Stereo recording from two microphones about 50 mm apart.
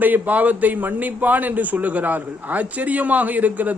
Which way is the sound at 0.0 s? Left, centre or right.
Right.